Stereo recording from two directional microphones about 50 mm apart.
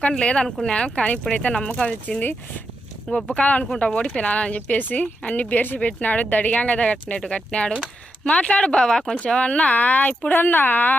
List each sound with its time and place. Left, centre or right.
0.2 s speech: centre
3.2 s speech: left